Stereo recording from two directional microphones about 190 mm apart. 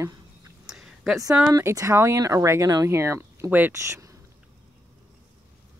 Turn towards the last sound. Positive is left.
turn(degrees=-10)  # may be behind; listen again after turning